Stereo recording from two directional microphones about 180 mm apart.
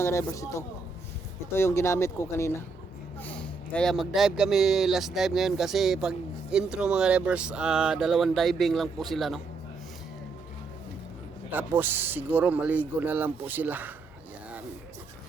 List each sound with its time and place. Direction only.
0.0 s speech: 15° left (ahead or behind); by 9.4 s centre (ahead or behind)
11.5 s speech: 10° right (ahead or behind)